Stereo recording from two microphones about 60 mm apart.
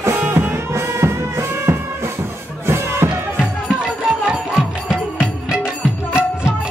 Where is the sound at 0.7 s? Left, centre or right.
Right.